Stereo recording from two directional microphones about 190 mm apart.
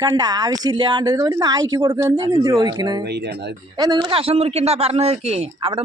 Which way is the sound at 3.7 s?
20° right (ahead or behind).